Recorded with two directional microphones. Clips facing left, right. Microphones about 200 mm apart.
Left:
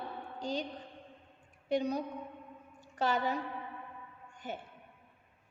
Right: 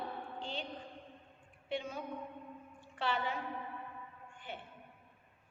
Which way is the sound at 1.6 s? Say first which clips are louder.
Left 8 dB; 40° left (ahead or behind).